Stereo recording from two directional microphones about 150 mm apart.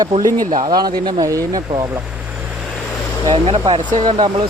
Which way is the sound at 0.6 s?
25° right (ahead or behind).